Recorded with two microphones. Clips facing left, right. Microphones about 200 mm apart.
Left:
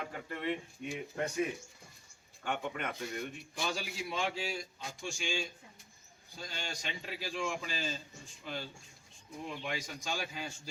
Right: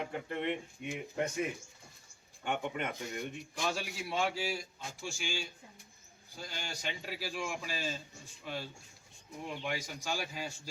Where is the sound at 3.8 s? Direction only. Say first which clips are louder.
Right 2 dB; 5° right (ahead or behind).